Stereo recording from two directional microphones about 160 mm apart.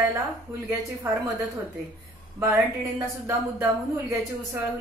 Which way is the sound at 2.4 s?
20° right (ahead or behind).